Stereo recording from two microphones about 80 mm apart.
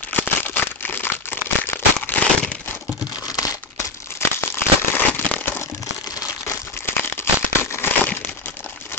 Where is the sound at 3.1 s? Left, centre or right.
Left.